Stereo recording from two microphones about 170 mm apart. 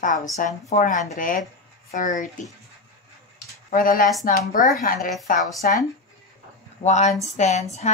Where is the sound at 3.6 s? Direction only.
55° left (ahead or behind).